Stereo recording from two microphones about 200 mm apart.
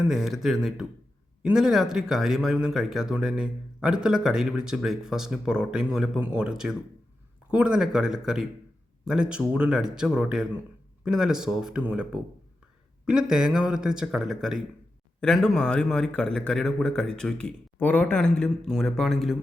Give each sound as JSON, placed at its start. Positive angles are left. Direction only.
{"t": 0.1, "sound": "speech", "side_deg": 0}